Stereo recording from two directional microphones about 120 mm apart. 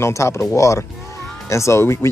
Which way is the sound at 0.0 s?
25° left (ahead or behind).